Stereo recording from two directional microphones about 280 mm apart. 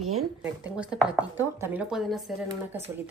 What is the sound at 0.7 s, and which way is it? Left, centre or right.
Speech, centre.